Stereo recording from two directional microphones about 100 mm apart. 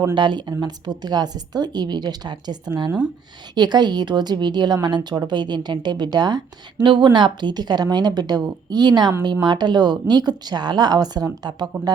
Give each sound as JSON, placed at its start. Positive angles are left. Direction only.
{"t": 0.1, "sound": "a woman's voice", "side_deg": -50}